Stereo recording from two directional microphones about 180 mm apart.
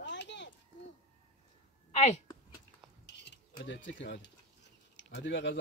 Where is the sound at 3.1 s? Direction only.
75° left (ahead or behind).